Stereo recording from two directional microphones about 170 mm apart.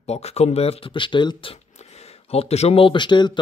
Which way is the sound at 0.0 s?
40° left (ahead or behind).